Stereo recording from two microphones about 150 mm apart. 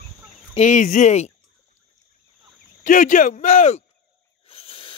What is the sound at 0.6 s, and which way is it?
Speech, 55° left (ahead or behind).